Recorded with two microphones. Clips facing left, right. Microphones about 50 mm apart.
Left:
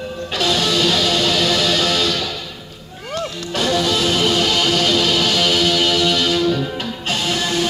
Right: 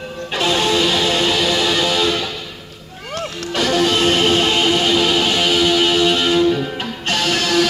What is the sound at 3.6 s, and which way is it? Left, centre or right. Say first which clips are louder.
Music: right 2 dB; right.